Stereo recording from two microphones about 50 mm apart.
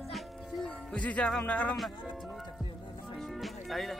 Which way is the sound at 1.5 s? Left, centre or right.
Left.